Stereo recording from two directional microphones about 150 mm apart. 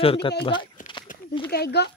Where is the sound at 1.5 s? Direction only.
90° left.